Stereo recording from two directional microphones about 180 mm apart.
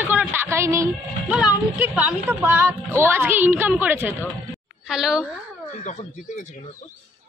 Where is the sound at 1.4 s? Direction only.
10° right (ahead or behind).